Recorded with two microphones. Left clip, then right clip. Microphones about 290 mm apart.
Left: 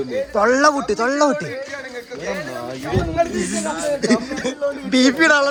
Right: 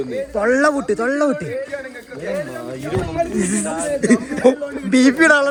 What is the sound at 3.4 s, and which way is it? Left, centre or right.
A man's voice, centre.